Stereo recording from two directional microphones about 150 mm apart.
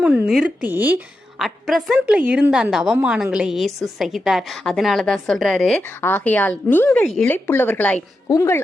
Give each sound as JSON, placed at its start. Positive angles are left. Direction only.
{"t": 0.0, "sound": "speech", "side_deg": -10}
{"t": 1.4, "sound": "a woman's voice", "side_deg": 0}
{"t": 6.0, "sound": "speech", "side_deg": 15}
{"t": 7.0, "sound": "a woman's voice", "side_deg": 0}
{"t": 7.3, "sound": "speech", "side_deg": 15}